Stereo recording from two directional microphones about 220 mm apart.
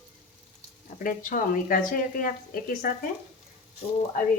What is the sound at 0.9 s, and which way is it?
Speech, 40° left (ahead or behind).